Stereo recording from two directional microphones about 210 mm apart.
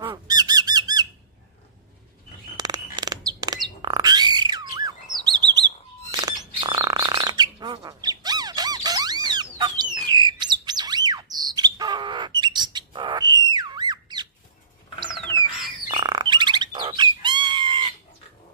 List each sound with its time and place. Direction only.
0.1 s squawk: 20° right (ahead or behind)
2.5 s bird: 20° right (ahead or behind)
3.8 s a sound: 20° right (ahead or behind)
5.2 s chirp: 20° right (ahead or behind)
6.1 s bird: 20° right (ahead or behind)
15.9 s bird: 20° right (ahead or behind)